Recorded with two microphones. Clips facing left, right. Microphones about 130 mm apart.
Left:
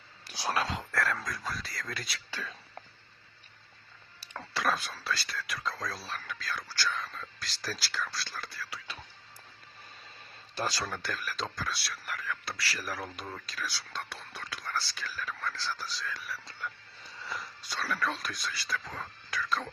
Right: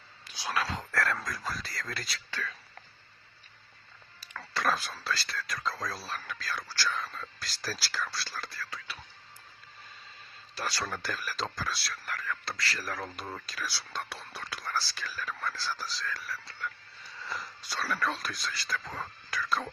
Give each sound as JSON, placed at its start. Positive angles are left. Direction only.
{"t": 0.6, "sound": "speech", "side_deg": 15}
{"t": 0.9, "sound": "speech", "side_deg": 0}
{"t": 2.3, "sound": "speech", "side_deg": 15}
{"t": 4.5, "sound": "speech", "side_deg": 0}
{"t": 10.8, "sound": "speech", "side_deg": 0}
{"t": 16.5, "sound": "a sound", "side_deg": 20}
{"t": 17.2, "sound": "speech", "side_deg": 0}